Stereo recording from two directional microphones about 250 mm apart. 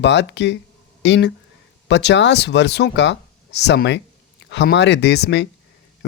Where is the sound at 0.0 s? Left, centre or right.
Left.